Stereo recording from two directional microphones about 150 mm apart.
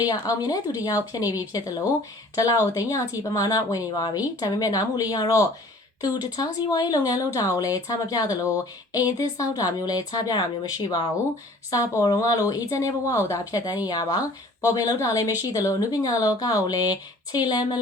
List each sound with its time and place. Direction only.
0.0 s a woman's voice: 25° left (ahead or behind)
2.7 s a woman's voice: 25° left (ahead or behind)